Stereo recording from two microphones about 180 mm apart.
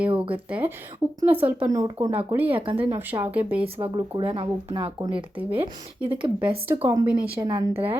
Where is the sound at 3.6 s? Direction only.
30° right (ahead or behind).